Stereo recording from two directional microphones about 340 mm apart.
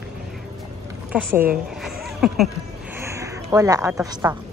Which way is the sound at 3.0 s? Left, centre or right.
Centre.